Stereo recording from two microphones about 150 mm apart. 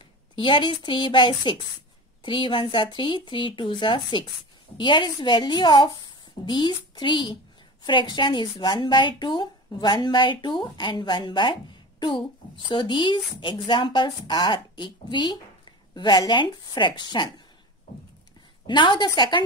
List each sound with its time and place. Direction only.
0.4 s speech: 35° left (ahead or behind)
12.6 s speech: 30° left (ahead or behind)
18.7 s speech: 30° left (ahead or behind)